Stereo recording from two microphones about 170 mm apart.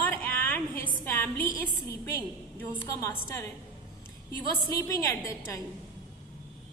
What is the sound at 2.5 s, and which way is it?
Speech, 15° left (ahead or behind).